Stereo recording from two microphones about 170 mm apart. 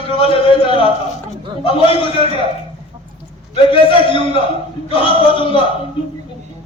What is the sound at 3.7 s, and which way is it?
A man's voice, 30° left (ahead or behind).